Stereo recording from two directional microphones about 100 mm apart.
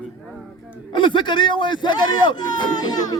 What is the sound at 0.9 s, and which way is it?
A man's voice, 50° left (ahead or behind).